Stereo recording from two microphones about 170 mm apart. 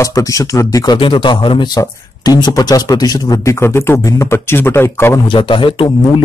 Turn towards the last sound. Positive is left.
turn(degrees=30)  # may be behind; listen again after turning